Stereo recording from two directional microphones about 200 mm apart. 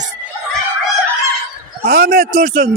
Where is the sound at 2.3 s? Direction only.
35° right (ahead or behind).